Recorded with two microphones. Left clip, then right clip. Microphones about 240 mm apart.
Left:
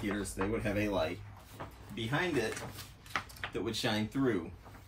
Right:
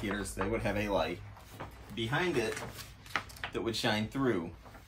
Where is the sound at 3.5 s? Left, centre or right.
Centre.